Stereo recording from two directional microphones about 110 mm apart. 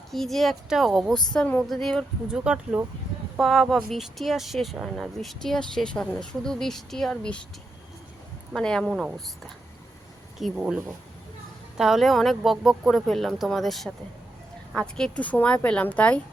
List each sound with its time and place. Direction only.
0.1 s speech: centre (ahead or behind)
1.3 s speech: 10° left (ahead or behind)
2.2 s speech: 5° right (ahead or behind)
8.5 s speech: 5° left (ahead or behind)
8.9 s speech: 5° right (ahead or behind)
10.6 s speech: 15° right (ahead or behind)
11.8 s speech: 5° right (ahead or behind)